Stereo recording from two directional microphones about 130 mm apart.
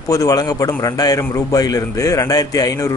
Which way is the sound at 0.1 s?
25° left (ahead or behind).